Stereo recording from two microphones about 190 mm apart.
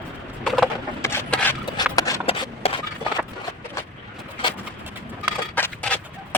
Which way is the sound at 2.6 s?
30° left (ahead or behind).